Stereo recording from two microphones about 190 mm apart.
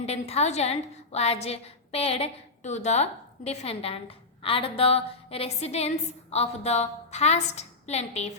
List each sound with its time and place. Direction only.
0.0 s a woman's voice: 35° left (ahead or behind)